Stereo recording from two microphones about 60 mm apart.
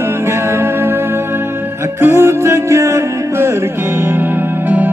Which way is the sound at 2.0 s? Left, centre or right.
Right.